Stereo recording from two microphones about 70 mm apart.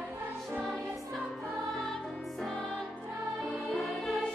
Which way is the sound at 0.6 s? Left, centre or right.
Centre.